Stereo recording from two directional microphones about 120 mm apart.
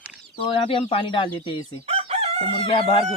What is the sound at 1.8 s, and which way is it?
Chicken, 60° right (ahead or behind).